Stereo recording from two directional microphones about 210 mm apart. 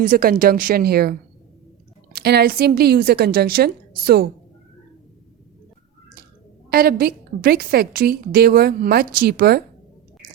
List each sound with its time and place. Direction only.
0.0 s a woman's voice: 40° right (ahead or behind)
2.1 s a woman's voice: 50° right (ahead or behind)
6.7 s a woman's voice: 45° right (ahead or behind)